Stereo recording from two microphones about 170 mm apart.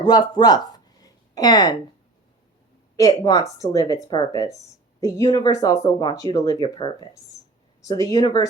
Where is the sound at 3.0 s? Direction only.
20° left (ahead or behind).